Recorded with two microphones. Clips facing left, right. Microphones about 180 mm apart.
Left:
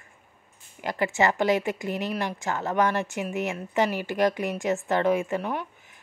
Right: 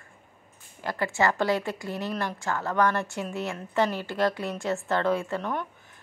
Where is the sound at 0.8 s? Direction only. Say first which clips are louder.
Left 2 dB; 20° left (ahead or behind).